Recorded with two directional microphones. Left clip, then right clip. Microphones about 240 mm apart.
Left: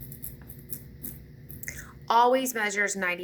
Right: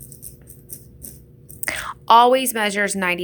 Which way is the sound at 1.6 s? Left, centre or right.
Right.